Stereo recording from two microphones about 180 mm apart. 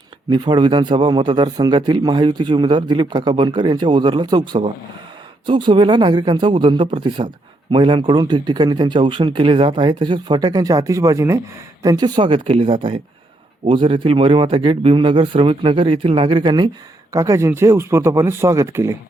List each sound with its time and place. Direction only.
0.3 s a man's voice: 25° right (ahead or behind)